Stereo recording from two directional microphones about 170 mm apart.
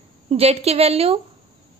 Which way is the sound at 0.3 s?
35° right (ahead or behind).